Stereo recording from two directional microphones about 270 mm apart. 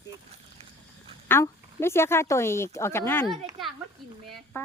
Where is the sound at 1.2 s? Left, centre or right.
Centre.